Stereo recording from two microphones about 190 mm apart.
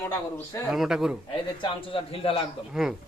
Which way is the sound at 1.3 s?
25° left (ahead or behind).